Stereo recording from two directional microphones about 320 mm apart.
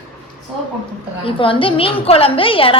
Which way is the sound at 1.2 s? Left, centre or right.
Centre.